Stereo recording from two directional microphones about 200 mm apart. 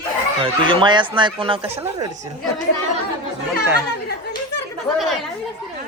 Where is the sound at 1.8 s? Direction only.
15° right (ahead or behind).